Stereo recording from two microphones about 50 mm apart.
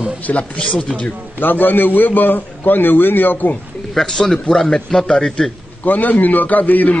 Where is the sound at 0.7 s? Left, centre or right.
Centre.